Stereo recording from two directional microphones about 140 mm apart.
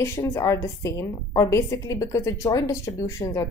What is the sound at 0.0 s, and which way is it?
A woman's voice, 15° left (ahead or behind).